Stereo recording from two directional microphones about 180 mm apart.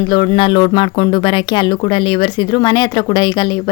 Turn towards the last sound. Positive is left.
turn(degrees=25)  # may be behind; listen again after turning